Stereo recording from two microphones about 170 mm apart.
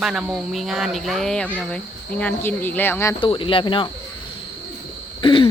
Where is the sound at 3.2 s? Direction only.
30° left (ahead or behind).